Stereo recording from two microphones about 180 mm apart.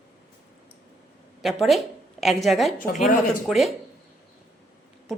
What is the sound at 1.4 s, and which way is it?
A woman's voice, centre (ahead or behind).